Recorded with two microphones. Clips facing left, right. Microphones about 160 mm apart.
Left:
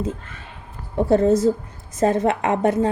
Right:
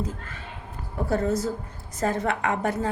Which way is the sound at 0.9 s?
25° left (ahead or behind).